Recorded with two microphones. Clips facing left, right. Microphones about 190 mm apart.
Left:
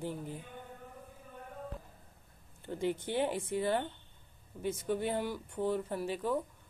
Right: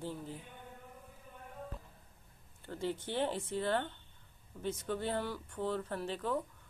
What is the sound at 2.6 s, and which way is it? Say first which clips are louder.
Speech: left 4 dB; 15° left (ahead or behind).